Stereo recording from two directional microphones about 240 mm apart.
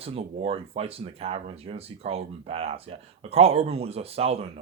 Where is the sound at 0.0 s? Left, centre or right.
Right.